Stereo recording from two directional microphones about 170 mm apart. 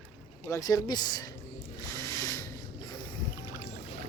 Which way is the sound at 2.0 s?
15° left (ahead or behind).